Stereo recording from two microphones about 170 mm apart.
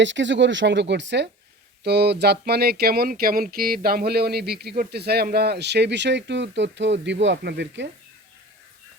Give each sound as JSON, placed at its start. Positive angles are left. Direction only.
{"t": 0.0, "sound": "speech", "side_deg": -90}
{"t": 1.8, "sound": "speech", "side_deg": -75}